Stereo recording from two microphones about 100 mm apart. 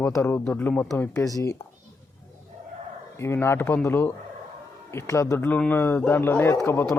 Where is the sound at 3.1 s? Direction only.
25° left (ahead or behind).